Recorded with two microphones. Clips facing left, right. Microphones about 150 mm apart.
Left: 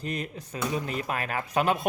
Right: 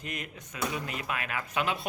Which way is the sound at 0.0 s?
35° left (ahead or behind).